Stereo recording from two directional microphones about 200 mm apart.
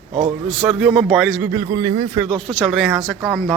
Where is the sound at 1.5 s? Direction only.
20° right (ahead or behind).